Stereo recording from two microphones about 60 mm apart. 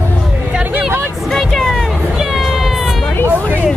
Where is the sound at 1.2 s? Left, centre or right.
Centre.